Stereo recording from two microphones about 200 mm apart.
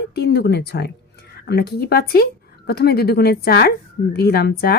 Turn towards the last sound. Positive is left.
turn(degrees=55)  # may be behind; listen again after turning